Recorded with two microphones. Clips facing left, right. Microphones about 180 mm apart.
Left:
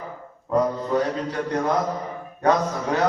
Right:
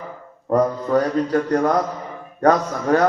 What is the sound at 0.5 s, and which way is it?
A man's voice, 45° right (ahead or behind).